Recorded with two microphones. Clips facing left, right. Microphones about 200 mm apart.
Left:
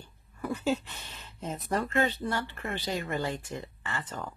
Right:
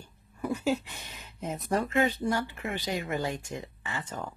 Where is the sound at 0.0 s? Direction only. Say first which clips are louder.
Right 2 dB; 10° right (ahead or behind).